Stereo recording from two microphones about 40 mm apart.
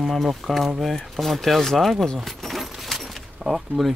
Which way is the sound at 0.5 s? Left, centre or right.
Centre.